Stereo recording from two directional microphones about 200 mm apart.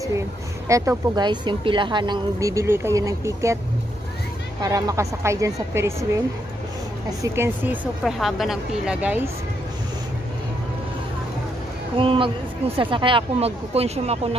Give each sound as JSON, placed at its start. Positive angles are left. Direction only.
{"t": 0.7, "sound": "a woman's voice", "side_deg": -15}
{"t": 4.6, "sound": "a woman's voice", "side_deg": -20}
{"t": 7.1, "sound": "a woman's voice", "side_deg": -15}
{"t": 12.0, "sound": "speech", "side_deg": -25}